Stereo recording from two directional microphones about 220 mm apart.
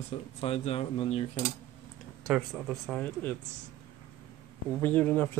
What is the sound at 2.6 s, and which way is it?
Speech, 5° left (ahead or behind).